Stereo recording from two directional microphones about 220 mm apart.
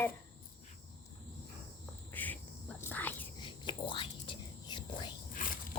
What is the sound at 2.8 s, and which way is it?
Whispering, 10° left (ahead or behind).